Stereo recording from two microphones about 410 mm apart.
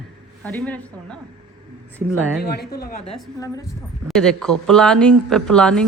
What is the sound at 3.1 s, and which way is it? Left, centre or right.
A woman's voice, centre.